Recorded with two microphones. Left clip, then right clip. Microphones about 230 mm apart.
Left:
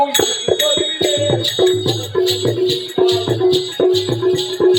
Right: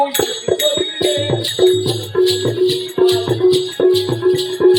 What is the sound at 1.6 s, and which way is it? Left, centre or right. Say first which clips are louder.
Music: right 2 dB; centre.